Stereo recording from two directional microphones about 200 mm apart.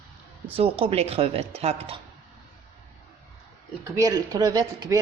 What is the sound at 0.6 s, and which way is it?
Speech, 30° right (ahead or behind).